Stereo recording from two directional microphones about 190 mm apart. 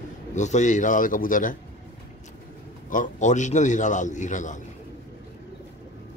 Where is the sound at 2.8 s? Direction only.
40° left (ahead or behind).